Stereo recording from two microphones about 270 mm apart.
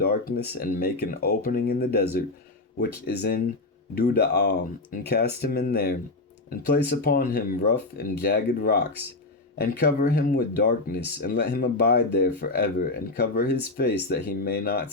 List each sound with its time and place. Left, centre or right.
0.0 s speech: left